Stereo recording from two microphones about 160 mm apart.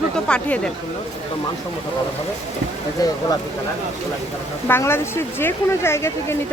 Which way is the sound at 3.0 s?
20° left (ahead or behind).